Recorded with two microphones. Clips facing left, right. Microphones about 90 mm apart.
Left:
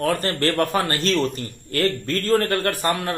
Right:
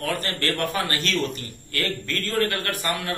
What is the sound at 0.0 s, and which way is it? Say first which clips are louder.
A man's voice: left 6 dB; 40° left (ahead or behind).